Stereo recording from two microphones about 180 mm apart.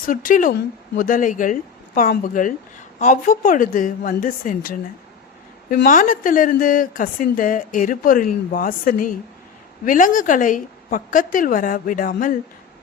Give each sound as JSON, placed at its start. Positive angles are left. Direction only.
{"t": 0.0, "sound": "a woman's voice", "side_deg": 50}